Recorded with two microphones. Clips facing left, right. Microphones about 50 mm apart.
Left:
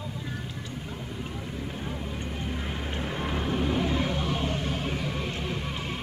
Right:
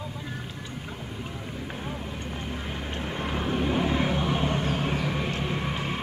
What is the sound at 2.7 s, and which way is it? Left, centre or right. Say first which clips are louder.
Vehicle: even; centre.